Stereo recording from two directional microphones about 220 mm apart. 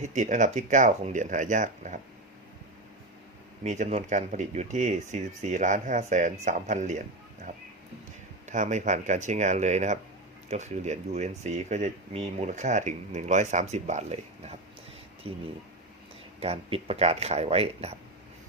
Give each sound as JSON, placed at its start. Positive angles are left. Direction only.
{"t": 0.0, "sound": "speech", "side_deg": -35}
{"t": 3.6, "sound": "speech", "side_deg": -30}
{"t": 8.4, "sound": "speech", "side_deg": -35}